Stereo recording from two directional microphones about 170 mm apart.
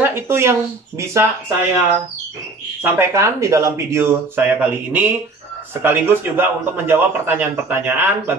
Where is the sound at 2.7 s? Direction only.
15° right (ahead or behind).